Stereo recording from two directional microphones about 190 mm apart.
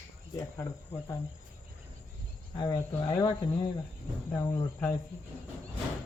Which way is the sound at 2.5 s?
20° left (ahead or behind).